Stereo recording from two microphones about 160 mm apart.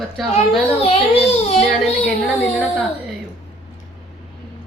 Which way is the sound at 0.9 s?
40° left (ahead or behind).